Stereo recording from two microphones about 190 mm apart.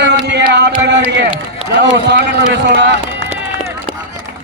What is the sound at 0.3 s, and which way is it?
Music, 65° right (ahead or behind).